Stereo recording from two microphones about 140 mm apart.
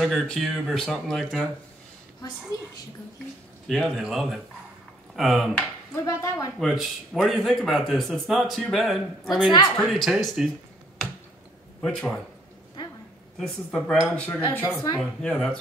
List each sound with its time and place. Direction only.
0.0 s speech: centre (ahead or behind)
3.6 s speech: centre (ahead or behind)
6.0 s speech: 20° left (ahead or behind)
6.6 s speech: centre (ahead or behind)
11.8 s speech: 5° left (ahead or behind)
13.4 s speech: 5° left (ahead or behind)